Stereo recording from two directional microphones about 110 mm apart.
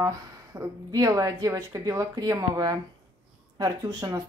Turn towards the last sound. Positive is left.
turn(degrees=-35)  # may be behind; listen again after turning